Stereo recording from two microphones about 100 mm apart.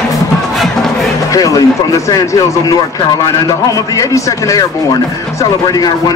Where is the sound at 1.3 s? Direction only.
35° left (ahead or behind).